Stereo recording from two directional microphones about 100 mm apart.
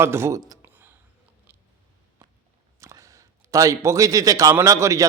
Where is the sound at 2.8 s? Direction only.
30° right (ahead or behind).